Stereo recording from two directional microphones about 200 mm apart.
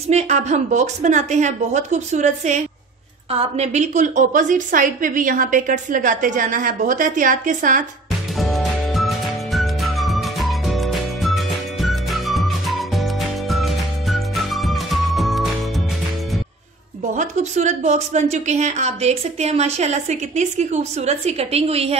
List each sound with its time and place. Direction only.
0.1 s a woman's voice: 35° right (ahead or behind)
8.4 s music: centre (ahead or behind)
17.1 s a woman's voice: 35° right (ahead or behind)